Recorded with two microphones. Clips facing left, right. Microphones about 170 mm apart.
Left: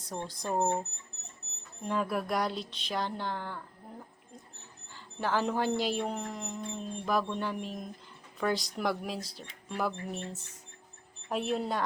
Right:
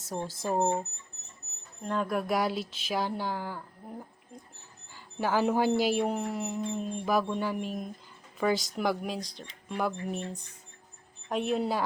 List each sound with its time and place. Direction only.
0.0 s speech: 5° right (ahead or behind)
1.8 s speech: 5° left (ahead or behind)
4.9 s speech: 10° right (ahead or behind)